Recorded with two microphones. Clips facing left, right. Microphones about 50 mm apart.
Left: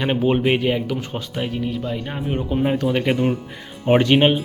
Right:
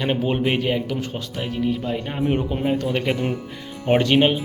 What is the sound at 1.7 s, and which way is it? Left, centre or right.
Speech, centre.